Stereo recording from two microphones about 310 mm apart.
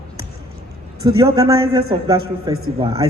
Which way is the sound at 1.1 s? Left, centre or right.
Centre.